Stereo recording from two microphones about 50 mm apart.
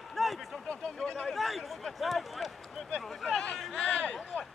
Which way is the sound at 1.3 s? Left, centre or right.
Centre.